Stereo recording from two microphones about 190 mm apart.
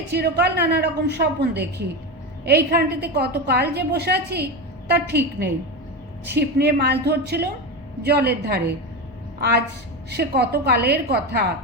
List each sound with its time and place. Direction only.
0.1 s a woman's voice: 60° right (ahead or behind)